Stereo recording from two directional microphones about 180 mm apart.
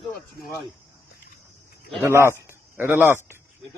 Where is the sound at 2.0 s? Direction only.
15° right (ahead or behind).